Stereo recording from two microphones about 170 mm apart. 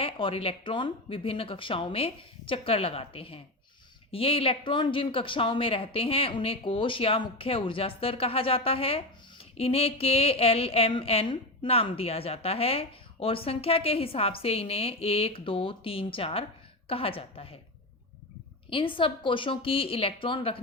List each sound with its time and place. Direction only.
0.0 s speech: 30° left (ahead or behind)
18.7 s speech: 30° left (ahead or behind)